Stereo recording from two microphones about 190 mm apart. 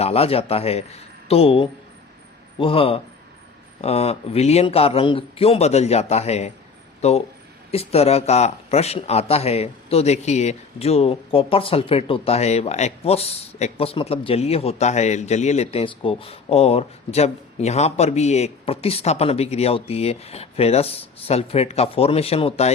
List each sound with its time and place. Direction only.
0.0 s speech: 30° left (ahead or behind)